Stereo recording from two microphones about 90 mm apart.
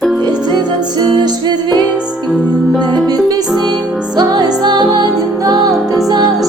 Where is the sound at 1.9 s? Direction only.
10° right (ahead or behind).